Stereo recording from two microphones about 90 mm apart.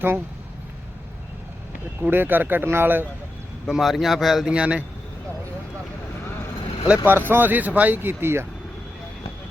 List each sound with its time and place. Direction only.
2.0 s speech: 25° right (ahead or behind)
3.7 s speech: centre (ahead or behind)
6.8 s speech: 15° right (ahead or behind)